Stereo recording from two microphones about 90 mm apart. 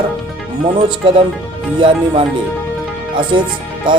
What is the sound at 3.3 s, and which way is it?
Speech, 75° right (ahead or behind).